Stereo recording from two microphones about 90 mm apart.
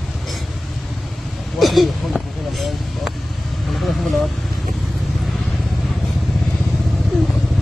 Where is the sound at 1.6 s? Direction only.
Centre (ahead or behind).